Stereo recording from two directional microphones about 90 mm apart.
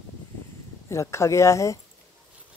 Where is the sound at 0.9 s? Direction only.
30° left (ahead or behind).